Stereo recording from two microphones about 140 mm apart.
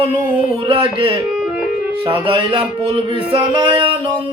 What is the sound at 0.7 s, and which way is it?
Speech, 35° right (ahead or behind).